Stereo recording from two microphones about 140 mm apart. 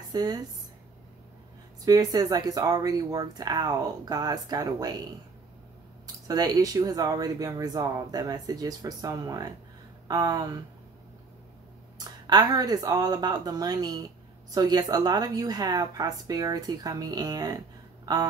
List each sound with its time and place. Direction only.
0.1 s speech: 30° right (ahead or behind)
1.9 s speech: 25° right (ahead or behind)
6.2 s speech: 25° right (ahead or behind)
12.0 s speech: 25° right (ahead or behind)